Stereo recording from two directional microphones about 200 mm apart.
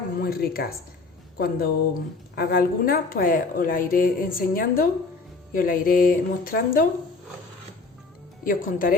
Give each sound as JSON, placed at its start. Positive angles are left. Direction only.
{"t": 0.2, "sound": "a woman's voice", "side_deg": 50}
{"t": 8.4, "sound": "a woman's voice", "side_deg": 45}